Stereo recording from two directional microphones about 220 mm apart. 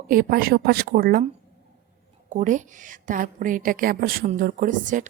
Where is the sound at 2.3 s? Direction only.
35° right (ahead or behind).